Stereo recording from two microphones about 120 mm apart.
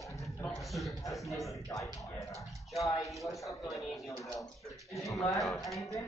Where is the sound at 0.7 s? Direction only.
Centre (ahead or behind).